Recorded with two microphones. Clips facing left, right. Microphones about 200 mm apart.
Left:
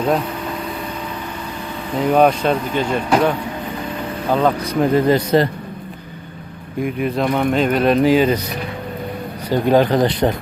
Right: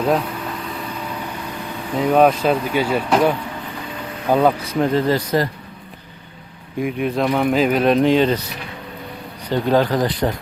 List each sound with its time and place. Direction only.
2.0 s speech: centre (ahead or behind)
4.9 s speech: 20° left (ahead or behind)
6.7 s speech: centre (ahead or behind)
9.5 s speech: 15° left (ahead or behind)